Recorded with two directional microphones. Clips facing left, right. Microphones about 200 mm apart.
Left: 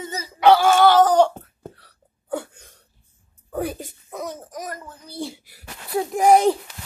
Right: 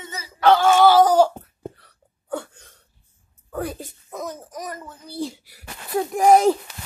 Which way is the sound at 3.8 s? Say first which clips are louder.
Even; centre (ahead or behind).